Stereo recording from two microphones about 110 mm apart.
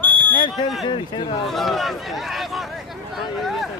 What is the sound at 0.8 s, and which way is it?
Speech, 45° left (ahead or behind).